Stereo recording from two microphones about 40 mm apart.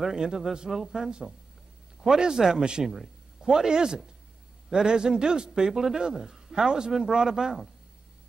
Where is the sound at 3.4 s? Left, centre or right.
Centre.